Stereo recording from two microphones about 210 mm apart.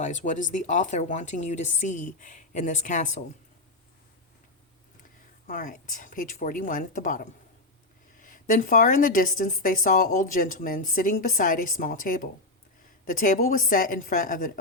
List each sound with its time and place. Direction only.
0.0 s a woman's voice: 35° left (ahead or behind)
5.5 s a woman's voice: 40° left (ahead or behind)